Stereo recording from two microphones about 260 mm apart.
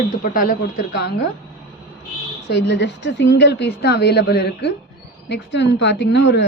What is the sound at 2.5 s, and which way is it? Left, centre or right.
Speech, left.